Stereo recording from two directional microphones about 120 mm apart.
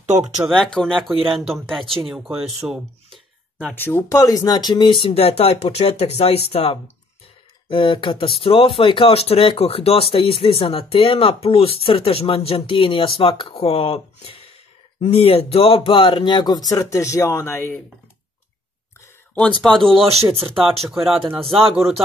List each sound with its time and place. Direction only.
0.0 s speech: 80° right
0.5 s speech: 5° left (ahead or behind)
3.5 s speech: 15° left (ahead or behind)
4.2 s speech: 30° left (ahead or behind)
20.0 s speech: 60° right (ahead or behind)
20.9 s speech: centre (ahead or behind)
21.4 s speech: 50° right (ahead or behind)
21.7 s speech: centre (ahead or behind)